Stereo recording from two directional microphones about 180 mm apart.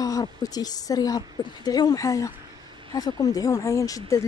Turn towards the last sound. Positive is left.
turn(degrees=20)  # may be behind; listen again after turning